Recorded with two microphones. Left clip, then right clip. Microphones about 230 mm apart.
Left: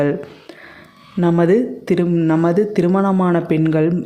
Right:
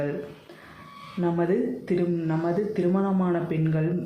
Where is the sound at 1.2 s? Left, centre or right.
Left.